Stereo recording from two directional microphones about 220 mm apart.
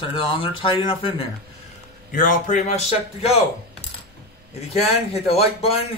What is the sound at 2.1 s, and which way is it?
Speech, 35° left (ahead or behind).